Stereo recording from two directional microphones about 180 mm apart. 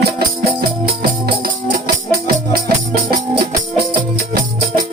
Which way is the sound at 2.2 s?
55° right (ahead or behind).